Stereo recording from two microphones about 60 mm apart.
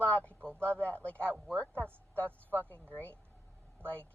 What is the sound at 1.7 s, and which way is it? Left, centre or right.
Speech, right.